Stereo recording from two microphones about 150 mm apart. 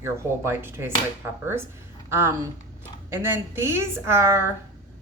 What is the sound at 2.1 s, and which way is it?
Speech, 15° right (ahead or behind).